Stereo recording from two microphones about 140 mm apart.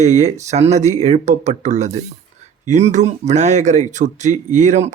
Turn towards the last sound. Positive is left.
turn(degrees=-55)  # may be behind; listen again after turning